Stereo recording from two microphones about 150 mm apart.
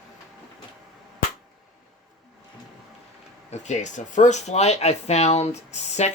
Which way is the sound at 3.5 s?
50° left (ahead or behind).